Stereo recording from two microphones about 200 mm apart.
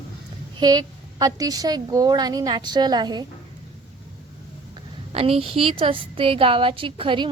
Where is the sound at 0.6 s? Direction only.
20° right (ahead or behind).